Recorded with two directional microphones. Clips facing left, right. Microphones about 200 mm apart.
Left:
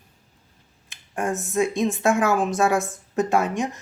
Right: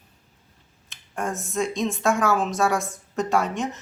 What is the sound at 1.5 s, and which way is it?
Speech, 15° left (ahead or behind).